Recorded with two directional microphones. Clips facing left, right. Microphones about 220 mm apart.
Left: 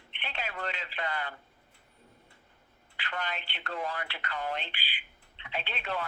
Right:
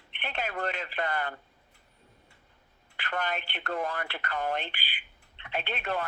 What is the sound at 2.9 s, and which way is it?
Speech, 50° right (ahead or behind).